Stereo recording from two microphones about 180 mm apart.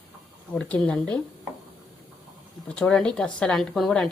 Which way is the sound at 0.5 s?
5° left (ahead or behind).